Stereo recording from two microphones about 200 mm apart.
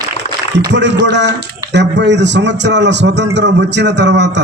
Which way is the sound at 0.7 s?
60° right (ahead or behind).